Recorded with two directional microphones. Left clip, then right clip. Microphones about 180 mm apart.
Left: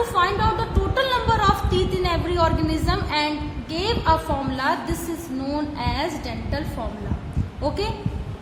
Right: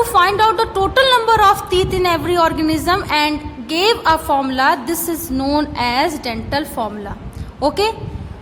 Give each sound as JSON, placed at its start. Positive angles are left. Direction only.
{"t": 0.1, "sound": "a woman's voice", "side_deg": -50}